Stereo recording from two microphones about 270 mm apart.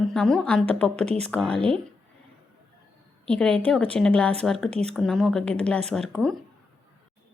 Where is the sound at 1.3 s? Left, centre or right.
Centre.